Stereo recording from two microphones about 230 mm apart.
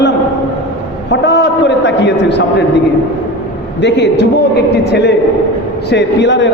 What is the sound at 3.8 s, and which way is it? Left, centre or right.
A man's voice, left.